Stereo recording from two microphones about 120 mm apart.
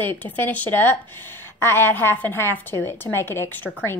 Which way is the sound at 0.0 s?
15° left (ahead or behind).